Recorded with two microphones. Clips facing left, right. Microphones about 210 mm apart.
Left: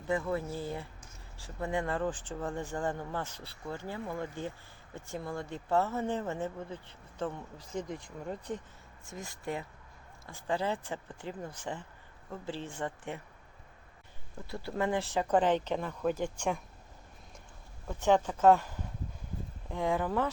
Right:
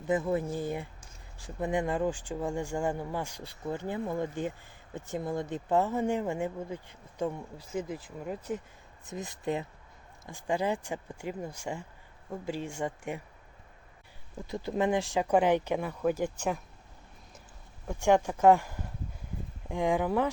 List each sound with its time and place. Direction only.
0.1 s speech: 20° right (ahead or behind)
9.0 s speech: 20° right (ahead or behind)
14.4 s speech: 20° right (ahead or behind)
17.8 s speech: 10° right (ahead or behind)